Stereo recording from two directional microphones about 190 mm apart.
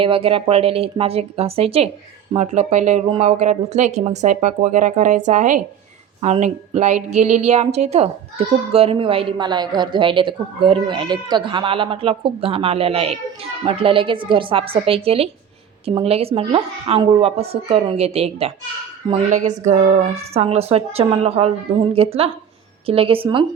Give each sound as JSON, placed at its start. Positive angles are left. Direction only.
{"t": 0.0, "sound": "a woman's voice", "side_deg": -30}